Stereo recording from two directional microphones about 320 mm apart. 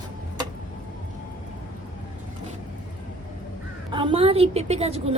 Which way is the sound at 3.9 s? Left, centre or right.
Centre.